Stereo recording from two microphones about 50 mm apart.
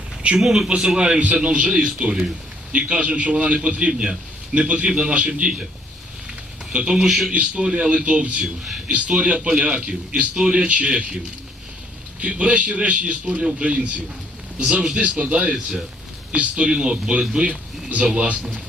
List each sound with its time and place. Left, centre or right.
0.3 s a man's voice: centre
0.9 s a man's voice: centre
6.7 s a man's voice: centre
7.0 s a man's voice: centre
7.3 s a man's voice: right
12.2 s a man's voice: right